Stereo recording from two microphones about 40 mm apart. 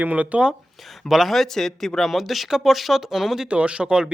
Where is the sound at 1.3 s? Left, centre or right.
Centre.